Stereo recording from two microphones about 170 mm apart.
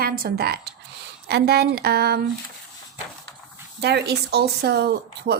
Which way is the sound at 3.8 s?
75° right (ahead or behind).